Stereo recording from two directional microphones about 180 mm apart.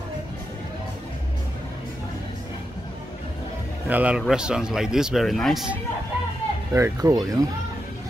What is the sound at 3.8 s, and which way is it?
A man's voice, 10° right (ahead or behind).